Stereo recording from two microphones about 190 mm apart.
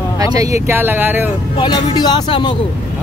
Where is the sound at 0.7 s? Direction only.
10° right (ahead or behind).